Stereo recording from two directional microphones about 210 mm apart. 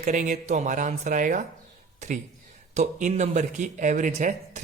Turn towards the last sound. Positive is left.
turn(degrees=-35)  # may be behind; listen again after turning